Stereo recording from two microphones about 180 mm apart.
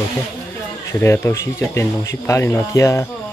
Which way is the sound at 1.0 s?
15° left (ahead or behind).